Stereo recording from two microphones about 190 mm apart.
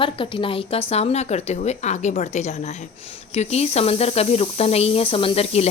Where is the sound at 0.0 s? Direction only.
25° left (ahead or behind).